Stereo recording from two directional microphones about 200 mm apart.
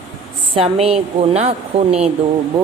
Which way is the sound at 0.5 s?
30° right (ahead or behind).